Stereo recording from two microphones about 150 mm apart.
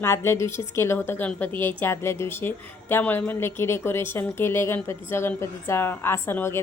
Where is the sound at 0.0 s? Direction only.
15° left (ahead or behind).